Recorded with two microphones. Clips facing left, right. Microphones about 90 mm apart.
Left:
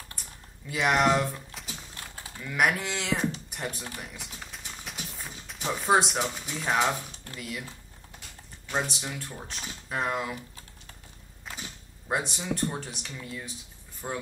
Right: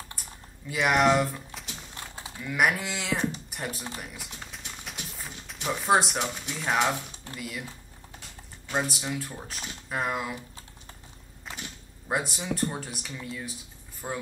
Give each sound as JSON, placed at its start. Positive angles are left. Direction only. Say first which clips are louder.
{"t": 0.7, "sound": "speech", "louder": "right 1 dB", "side_deg": 0}
{"t": 4.0, "sound": "a sound", "louder": "right 1 dB", "side_deg": 0}
{"t": 7.3, "sound": "speech", "louder": "even", "side_deg": 0}
{"t": 8.6, "sound": "speech", "louder": "right 1 dB", "side_deg": -5}
{"t": 12.1, "sound": "speech", "louder": "even", "side_deg": -5}